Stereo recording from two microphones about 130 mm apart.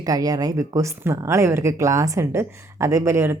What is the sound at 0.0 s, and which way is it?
Speech, 30° right (ahead or behind).